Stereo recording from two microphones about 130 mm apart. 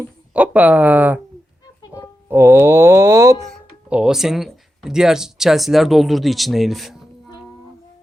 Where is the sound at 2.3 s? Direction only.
20° right (ahead or behind).